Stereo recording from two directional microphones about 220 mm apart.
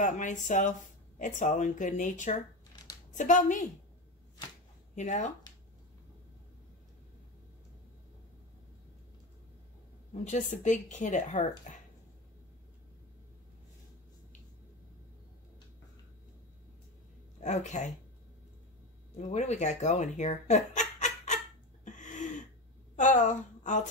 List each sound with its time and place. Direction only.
0.0 s speech: 35° left (ahead or behind)
4.9 s speech: 35° left (ahead or behind)
10.1 s speech: 35° left (ahead or behind)
17.4 s speech: 30° left (ahead or behind)
19.1 s speech: 30° left (ahead or behind)
21.8 s throat clearing: 35° left (ahead or behind)
22.9 s a woman's voice: 35° left (ahead or behind)